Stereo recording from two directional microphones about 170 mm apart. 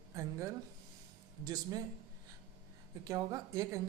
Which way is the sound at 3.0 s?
20° right (ahead or behind).